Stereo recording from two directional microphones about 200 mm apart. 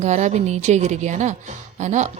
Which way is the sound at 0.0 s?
35° right (ahead or behind).